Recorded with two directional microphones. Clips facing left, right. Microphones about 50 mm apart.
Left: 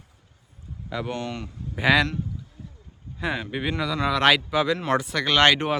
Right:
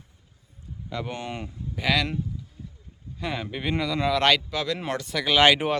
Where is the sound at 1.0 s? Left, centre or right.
Centre.